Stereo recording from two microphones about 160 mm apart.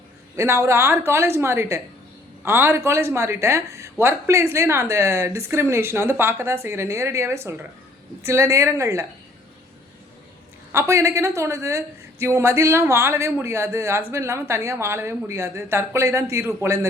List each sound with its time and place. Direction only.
0.3 s speech: 15° right (ahead or behind)
10.7 s speech: 15° right (ahead or behind)